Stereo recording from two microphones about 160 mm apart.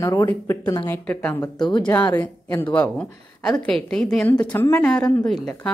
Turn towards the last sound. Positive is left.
turn(degrees=5)  # may be behind; listen again after turning